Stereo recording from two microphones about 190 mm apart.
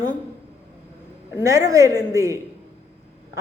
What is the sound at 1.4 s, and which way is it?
A woman's voice, 15° right (ahead or behind).